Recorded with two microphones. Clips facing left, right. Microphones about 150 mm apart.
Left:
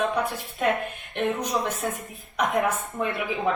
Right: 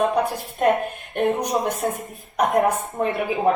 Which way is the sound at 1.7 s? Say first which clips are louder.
Right 5 dB; 35° right (ahead or behind).